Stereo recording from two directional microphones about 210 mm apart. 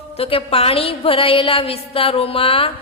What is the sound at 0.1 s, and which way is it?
A woman's voice, 25° left (ahead or behind).